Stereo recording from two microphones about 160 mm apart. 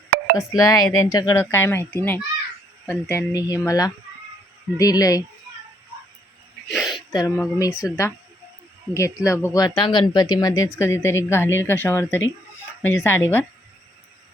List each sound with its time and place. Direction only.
0.3 s speech: 20° left (ahead or behind)
6.7 s a sound: centre (ahead or behind)
7.1 s speech: 20° left (ahead or behind)